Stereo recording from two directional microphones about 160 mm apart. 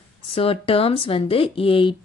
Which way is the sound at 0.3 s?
35° left (ahead or behind).